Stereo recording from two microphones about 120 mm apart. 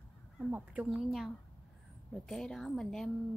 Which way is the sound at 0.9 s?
Centre (ahead or behind).